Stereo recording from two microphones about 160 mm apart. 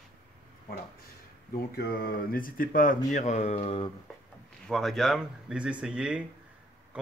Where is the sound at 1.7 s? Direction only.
70° left (ahead or behind); by 3.9 s 35° left (ahead or behind).